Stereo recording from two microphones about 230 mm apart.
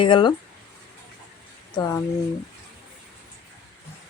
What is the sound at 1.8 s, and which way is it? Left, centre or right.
Speech, centre.